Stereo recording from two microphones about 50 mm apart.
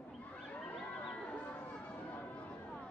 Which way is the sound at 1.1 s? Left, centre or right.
Left.